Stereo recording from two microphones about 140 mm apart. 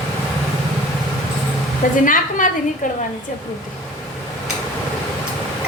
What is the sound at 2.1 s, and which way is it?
Speech, 70° left (ahead or behind).